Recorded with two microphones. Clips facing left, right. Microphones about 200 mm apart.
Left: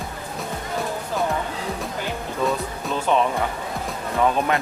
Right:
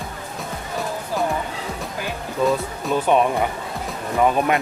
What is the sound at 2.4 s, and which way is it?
Speech, centre (ahead or behind).